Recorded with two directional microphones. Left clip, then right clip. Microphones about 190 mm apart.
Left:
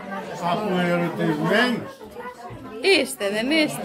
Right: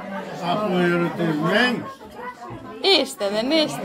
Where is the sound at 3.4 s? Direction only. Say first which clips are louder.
Right 1 dB; centre (ahead or behind).